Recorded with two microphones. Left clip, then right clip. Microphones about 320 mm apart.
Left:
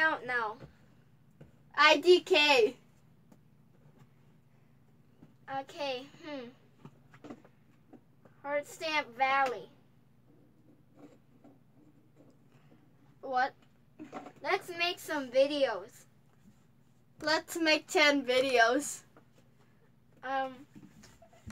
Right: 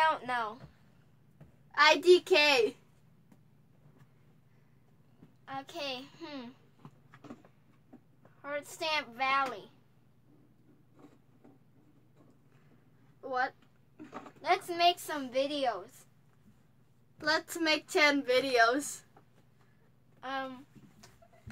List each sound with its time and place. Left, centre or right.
0.0 s a sound: centre
1.7 s a woman's voice: centre
5.4 s speech: centre
8.4 s speech: centre
13.2 s speech: centre
14.4 s speech: centre
17.2 s a woman's voice: centre
20.2 s speech: centre